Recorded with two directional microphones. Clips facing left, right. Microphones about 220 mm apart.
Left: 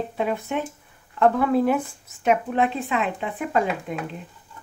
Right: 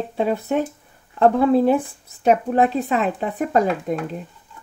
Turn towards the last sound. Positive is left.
turn(degrees=-40)  # may be behind; listen again after turning